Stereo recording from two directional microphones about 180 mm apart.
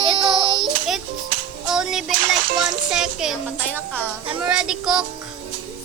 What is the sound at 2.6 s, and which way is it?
Speech, 5° right (ahead or behind).